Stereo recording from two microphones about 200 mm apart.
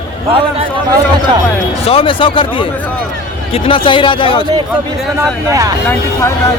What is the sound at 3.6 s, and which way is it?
Speech, 25° left (ahead or behind).